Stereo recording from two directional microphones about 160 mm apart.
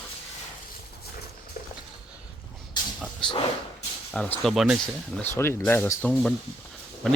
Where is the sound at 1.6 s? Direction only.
60° left (ahead or behind).